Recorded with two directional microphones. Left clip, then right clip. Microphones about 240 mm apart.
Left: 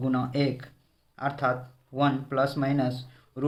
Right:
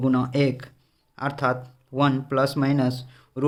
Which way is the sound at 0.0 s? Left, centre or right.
Right.